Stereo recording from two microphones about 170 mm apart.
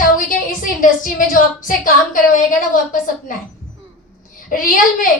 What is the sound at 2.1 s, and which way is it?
A woman's voice, 50° left (ahead or behind).